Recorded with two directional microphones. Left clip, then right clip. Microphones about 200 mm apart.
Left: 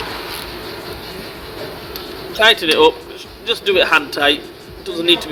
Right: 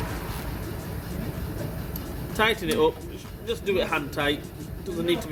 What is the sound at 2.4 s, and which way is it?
A man's voice, 35° left (ahead or behind).